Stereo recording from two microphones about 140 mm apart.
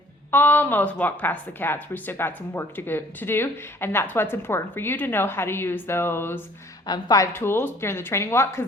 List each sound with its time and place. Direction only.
0.3 s speech: 15° left (ahead or behind)
6.8 s a woman's voice: 30° left (ahead or behind)
7.3 s speech: 15° left (ahead or behind)